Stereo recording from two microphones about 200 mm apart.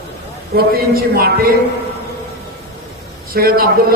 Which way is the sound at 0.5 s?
55° right (ahead or behind).